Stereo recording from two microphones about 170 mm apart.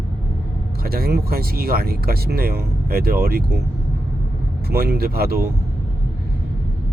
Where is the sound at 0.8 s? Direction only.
65° right (ahead or behind).